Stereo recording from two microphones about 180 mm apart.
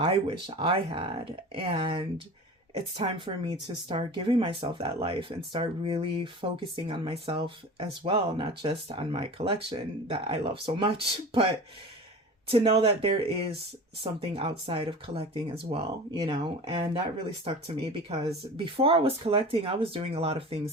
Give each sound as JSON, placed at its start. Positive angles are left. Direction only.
{"t": 0.0, "sound": "speech", "side_deg": -30}